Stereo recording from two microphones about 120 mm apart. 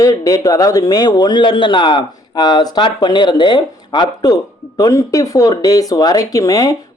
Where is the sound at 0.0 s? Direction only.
30° left (ahead or behind).